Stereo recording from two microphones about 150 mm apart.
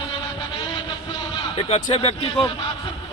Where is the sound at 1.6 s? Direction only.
40° left (ahead or behind).